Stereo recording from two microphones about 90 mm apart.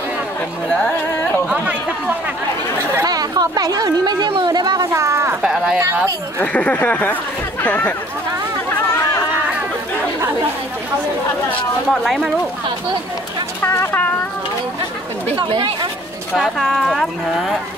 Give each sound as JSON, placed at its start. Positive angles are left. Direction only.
{"t": 1.5, "sound": "chatter", "side_deg": -15}
{"t": 3.1, "sound": "speech", "side_deg": -45}
{"t": 4.5, "sound": "a sound", "side_deg": -50}
{"t": 4.9, "sound": "a sound", "side_deg": -30}
{"t": 5.4, "sound": "a sound", "side_deg": -5}
{"t": 6.4, "sound": "speech", "side_deg": 15}
{"t": 8.6, "sound": "chatter", "side_deg": 35}
{"t": 11.9, "sound": "speech", "side_deg": 0}
{"t": 13.7, "sound": "speech", "side_deg": 25}
{"t": 15.3, "sound": "speech", "side_deg": -60}
{"t": 16.3, "sound": "speech", "side_deg": 0}